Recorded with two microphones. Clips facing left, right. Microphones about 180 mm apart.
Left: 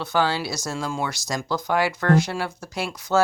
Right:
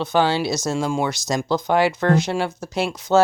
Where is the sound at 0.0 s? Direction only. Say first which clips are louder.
Right 4 dB; 20° right (ahead or behind).